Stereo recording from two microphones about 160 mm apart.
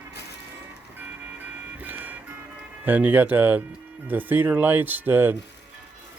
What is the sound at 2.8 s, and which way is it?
Speech, 10° right (ahead or behind).